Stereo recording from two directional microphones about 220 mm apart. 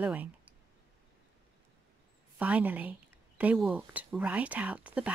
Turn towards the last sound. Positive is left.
turn(degrees=-5)  # may be behind; listen again after turning